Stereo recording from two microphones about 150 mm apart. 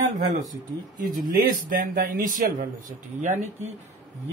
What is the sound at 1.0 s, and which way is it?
Speech, 80° right.